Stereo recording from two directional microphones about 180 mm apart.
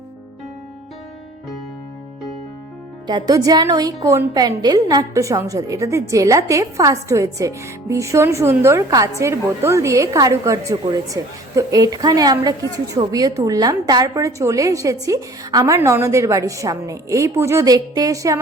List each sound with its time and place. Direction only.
3.1 s a woman's voice: 20° right (ahead or behind)